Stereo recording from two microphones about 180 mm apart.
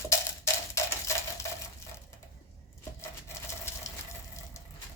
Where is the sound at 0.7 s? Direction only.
15° left (ahead or behind).